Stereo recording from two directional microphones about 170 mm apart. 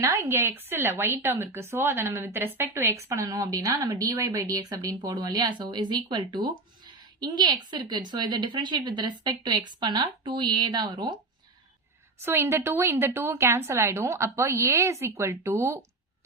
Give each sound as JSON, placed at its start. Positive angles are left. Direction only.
{"t": 0.0, "sound": "speech", "side_deg": -15}
{"t": 12.2, "sound": "speech", "side_deg": -15}